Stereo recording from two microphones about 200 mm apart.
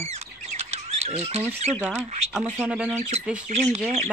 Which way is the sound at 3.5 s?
40° right (ahead or behind).